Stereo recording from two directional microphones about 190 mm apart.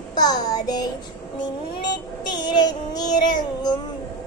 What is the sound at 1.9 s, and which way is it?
Child singing, 20° left (ahead or behind).